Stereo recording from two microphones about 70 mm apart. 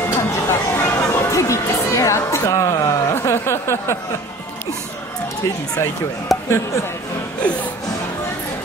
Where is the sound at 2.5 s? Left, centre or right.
Left.